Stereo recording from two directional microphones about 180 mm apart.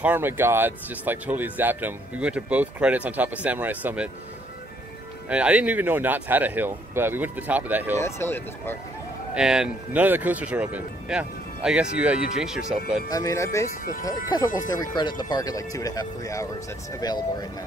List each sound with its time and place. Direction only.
0.0 s speech: 10° right (ahead or behind)
5.3 s speech: 5° right (ahead or behind)
8.0 s speech: 15° left (ahead or behind)
9.3 s speech: 5° right (ahead or behind)
13.1 s speech: 20° left (ahead or behind)